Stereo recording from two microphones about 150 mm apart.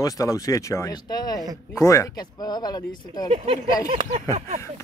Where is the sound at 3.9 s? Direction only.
40° right (ahead or behind).